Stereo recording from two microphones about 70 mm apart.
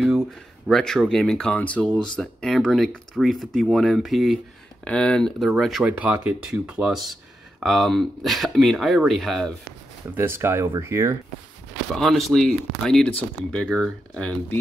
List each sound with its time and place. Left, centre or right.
0.7 s speech: centre
4.8 s speech: centre
5.5 s speech: centre
5.9 s speech: right
6.5 s speech: centre
6.9 s speech: centre
10.1 s speech: right
11.9 s speech: centre
12.8 s speech: centre